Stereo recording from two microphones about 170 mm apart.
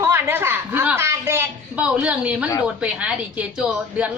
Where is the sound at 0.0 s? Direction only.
15° right (ahead or behind).